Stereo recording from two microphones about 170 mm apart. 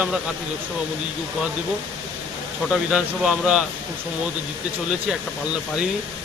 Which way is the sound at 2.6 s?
5° right (ahead or behind).